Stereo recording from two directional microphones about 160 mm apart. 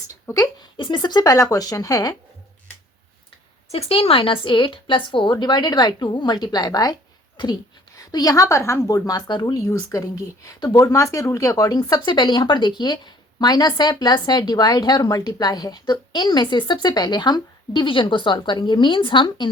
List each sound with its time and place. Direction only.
0.3 s a woman's voice: 20° left (ahead or behind)
3.7 s a woman's voice: 40° left (ahead or behind)